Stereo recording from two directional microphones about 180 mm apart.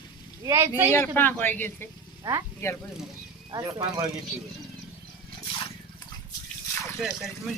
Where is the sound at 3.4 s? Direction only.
20° right (ahead or behind).